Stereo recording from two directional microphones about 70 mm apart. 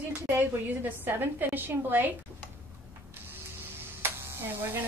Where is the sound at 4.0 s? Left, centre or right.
Right.